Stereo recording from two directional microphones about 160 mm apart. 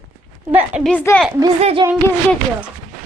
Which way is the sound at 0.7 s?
5° right (ahead or behind).